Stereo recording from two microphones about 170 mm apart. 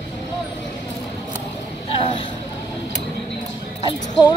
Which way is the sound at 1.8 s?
30° left (ahead or behind).